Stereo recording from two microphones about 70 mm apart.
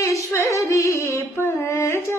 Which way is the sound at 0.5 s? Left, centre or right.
Left.